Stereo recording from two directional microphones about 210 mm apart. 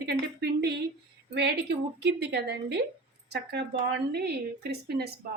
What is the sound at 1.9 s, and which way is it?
Speech, 50° right (ahead or behind).